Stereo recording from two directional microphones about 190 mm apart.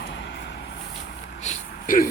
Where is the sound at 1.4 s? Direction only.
40° left (ahead or behind).